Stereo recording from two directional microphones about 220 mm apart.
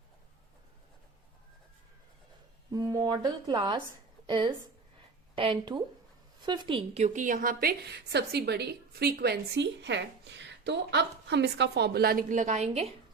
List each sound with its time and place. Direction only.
2.7 s a woman's voice: 15° right (ahead or behind)